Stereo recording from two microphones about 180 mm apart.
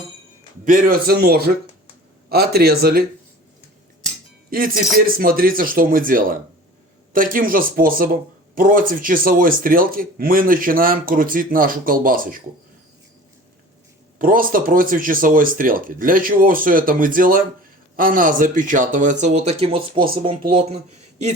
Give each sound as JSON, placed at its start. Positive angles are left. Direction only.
{"t": 0.6, "sound": "speech", "side_deg": -45}
{"t": 4.4, "sound": "speech", "side_deg": -55}
{"t": 14.2, "sound": "speech", "side_deg": -50}